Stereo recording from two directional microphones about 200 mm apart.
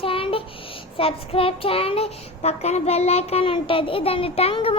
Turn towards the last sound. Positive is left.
turn(degrees=30)  # may be behind; listen again after turning